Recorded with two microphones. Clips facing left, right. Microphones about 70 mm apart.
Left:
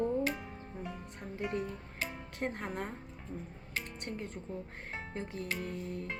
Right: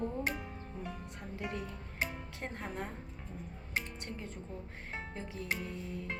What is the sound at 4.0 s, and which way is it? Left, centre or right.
A woman's voice, left.